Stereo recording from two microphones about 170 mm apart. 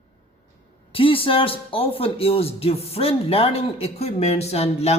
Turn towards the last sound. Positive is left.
turn(degrees=40)  # may be behind; listen again after turning